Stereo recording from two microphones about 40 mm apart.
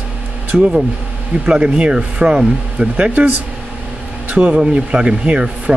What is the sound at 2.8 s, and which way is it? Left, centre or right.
Speech, right.